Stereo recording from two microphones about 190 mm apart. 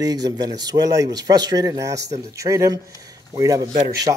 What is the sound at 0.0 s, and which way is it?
Speech, 20° right (ahead or behind).